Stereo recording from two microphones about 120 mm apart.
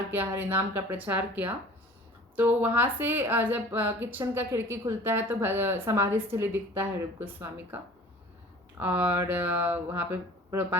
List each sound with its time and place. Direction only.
0.1 s a woman's voice: 15° right (ahead or behind)
8.8 s a woman's voice: 15° right (ahead or behind)